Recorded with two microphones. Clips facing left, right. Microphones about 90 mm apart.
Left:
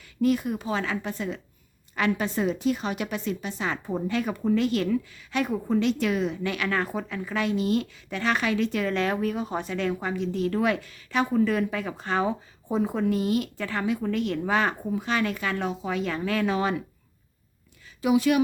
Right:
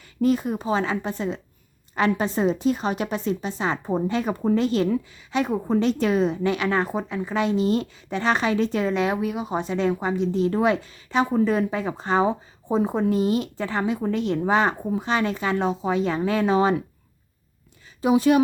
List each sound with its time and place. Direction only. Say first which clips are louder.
0.2 s a woman's voice: right 2 dB; 35° right (ahead or behind)
8.9 s a woman's voice: right 2 dB; 15° right (ahead or behind)
18.0 s a woman's voice: right 3 dB; 30° right (ahead or behind)